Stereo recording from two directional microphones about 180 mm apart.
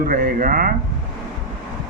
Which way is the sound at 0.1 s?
50° right (ahead or behind).